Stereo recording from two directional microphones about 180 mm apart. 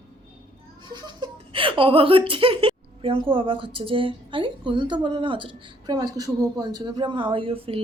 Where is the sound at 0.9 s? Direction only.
25° right (ahead or behind).